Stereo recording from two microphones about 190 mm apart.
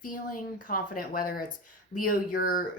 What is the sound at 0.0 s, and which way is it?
Speech, 45° left (ahead or behind).